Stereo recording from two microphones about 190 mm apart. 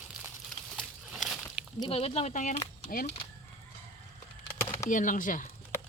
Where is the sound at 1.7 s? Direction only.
30° left (ahead or behind); by 3.1 s 45° left (ahead or behind).